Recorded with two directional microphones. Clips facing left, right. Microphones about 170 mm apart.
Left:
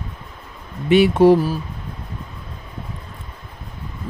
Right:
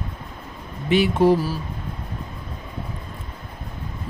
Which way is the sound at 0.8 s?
65° left (ahead or behind).